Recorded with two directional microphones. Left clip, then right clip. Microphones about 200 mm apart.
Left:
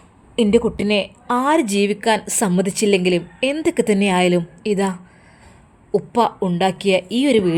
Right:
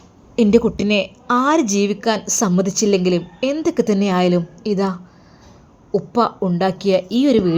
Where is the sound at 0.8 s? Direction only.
15° left (ahead or behind).